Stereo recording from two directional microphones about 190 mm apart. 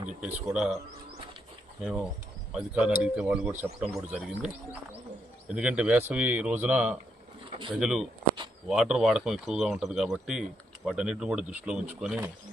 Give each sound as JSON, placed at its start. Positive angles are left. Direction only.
{"t": 0.4, "sound": "speech", "side_deg": 0}
{"t": 1.8, "sound": "speech", "side_deg": -5}